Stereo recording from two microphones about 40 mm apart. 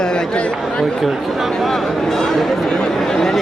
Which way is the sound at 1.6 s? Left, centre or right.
Centre.